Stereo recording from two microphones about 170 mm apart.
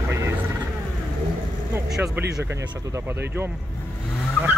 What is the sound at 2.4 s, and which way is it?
Speech, 15° right (ahead or behind).